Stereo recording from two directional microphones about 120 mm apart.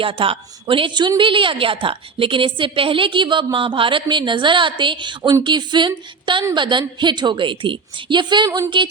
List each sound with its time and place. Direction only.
0.0 s a woman's voice: 50° right (ahead or behind)
8.4 s speech: 25° right (ahead or behind)